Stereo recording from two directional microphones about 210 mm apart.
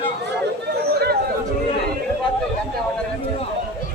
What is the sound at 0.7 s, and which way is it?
Chatter, 50° right (ahead or behind).